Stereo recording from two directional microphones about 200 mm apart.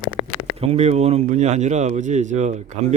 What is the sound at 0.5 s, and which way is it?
A man's voice, 30° right (ahead or behind).